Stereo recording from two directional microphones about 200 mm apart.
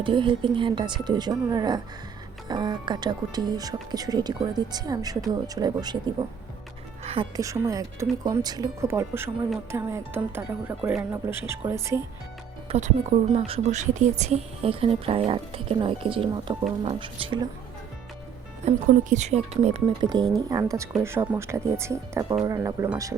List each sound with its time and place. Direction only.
0.0 s speech: 25° right (ahead or behind)
7.3 s speech: 15° right (ahead or behind)
12.6 s speech: 35° right (ahead or behind)
18.6 s speech: 35° right (ahead or behind)
20.1 s speech: 20° right (ahead or behind)